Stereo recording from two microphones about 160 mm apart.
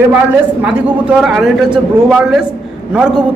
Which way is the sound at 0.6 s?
5° right (ahead or behind).